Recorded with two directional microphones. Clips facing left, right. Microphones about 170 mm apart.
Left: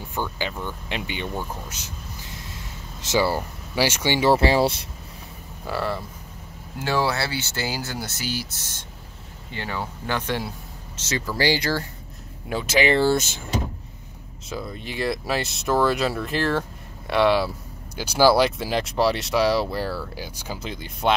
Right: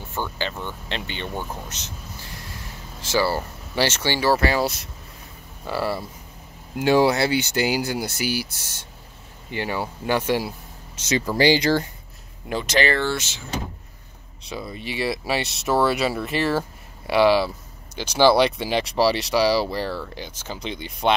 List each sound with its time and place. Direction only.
0.1 s speech: 10° left (ahead or behind)
2.2 s speech: 20° left (ahead or behind)
5.7 s speech: 5° right (ahead or behind)
6.8 s speech: 20° right (ahead or behind)
11.0 s speech: 20° right (ahead or behind)
12.4 s speech: 5° left (ahead or behind)
13.0 s speech: 40° left (ahead or behind)
14.4 s speech: centre (ahead or behind)